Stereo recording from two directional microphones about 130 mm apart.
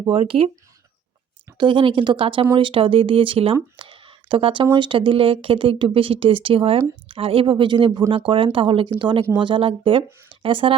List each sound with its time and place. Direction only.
0.1 s speech: 45° right (ahead or behind)
1.5 s speech: 40° right (ahead or behind)